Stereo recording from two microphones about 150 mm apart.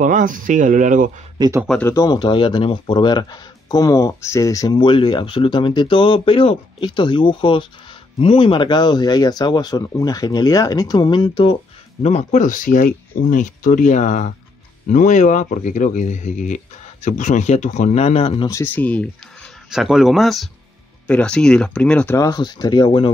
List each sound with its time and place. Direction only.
0.0 s speech: 60° right (ahead or behind)
1.8 s speech: 20° left (ahead or behind)
12.0 s speech: 45° left (ahead or behind)
18.5 s speech: 15° left (ahead or behind)
19.7 s speech: 5° right (ahead or behind)
22.1 s speech: 25° left (ahead or behind)